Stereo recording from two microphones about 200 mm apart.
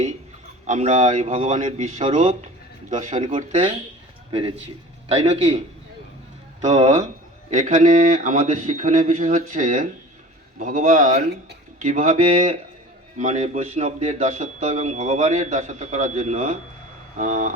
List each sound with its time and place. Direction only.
0.7 s a man's voice: 35° right (ahead or behind)
3.2 s a man's voice: 25° right (ahead or behind)